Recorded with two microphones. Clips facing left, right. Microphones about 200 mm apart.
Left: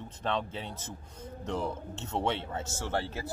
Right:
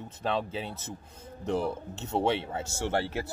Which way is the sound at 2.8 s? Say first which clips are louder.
Right 5 dB; 70° right (ahead or behind).